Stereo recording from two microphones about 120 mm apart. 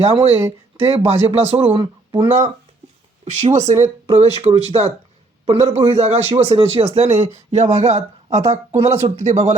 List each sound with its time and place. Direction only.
0.0 s a man's voice: 60° right (ahead or behind)
3.2 s a man's voice: 70° right (ahead or behind)